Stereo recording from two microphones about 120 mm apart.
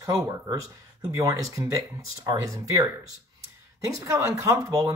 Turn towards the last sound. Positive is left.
turn(degrees=-25)  # may be behind; listen again after turning